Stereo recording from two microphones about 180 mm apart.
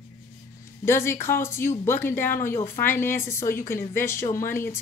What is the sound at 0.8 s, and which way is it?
Speech, 15° left (ahead or behind).